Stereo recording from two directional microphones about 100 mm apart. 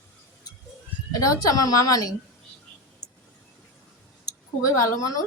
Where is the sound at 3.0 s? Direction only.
40° left (ahead or behind).